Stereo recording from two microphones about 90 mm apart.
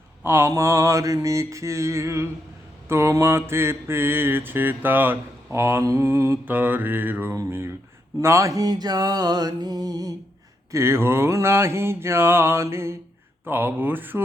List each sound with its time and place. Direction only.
0.2 s mantra: 30° right (ahead or behind)
6.4 s mantra: 20° right (ahead or behind)
8.2 s a sound: 30° right (ahead or behind)
10.7 s mantra: 30° right (ahead or behind)